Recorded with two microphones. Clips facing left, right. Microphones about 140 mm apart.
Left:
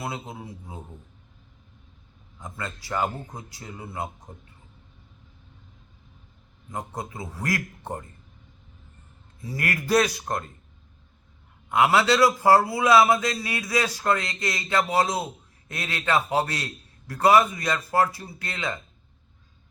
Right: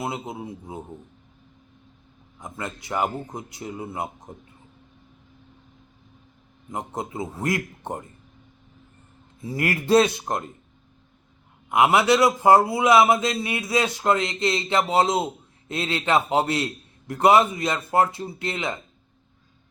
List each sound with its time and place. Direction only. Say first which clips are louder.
0.0 s a man's voice: right 4 dB; 20° right (ahead or behind)
2.4 s a man's voice: right 2 dB; 20° right (ahead or behind)
6.7 s a man's voice: right 3 dB; 20° right (ahead or behind)
9.4 s a man's voice: right 4 dB; 25° right (ahead or behind)
11.7 s a man's voice: right 2 dB; 20° right (ahead or behind)